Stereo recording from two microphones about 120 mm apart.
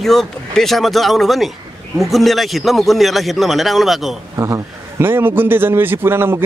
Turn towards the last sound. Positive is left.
turn(degrees=-20)  # may be behind; listen again after turning